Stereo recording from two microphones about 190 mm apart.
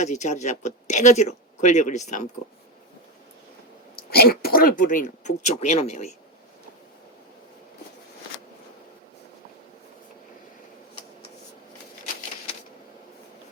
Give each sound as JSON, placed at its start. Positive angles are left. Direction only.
{"t": 0.0, "sound": "speech", "side_deg": 40}
{"t": 4.1, "sound": "speech", "side_deg": 55}